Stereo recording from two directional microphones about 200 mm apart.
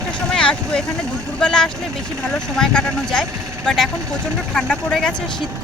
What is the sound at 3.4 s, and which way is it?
Vehicle, 15° right (ahead or behind).